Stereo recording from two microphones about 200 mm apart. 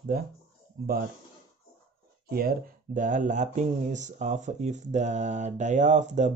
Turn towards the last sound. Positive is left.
turn(degrees=-35)  # may be behind; listen again after turning